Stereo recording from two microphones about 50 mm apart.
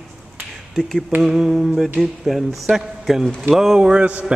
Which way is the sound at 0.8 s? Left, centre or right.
Centre.